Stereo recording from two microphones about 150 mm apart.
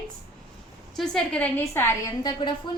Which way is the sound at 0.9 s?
5° left (ahead or behind).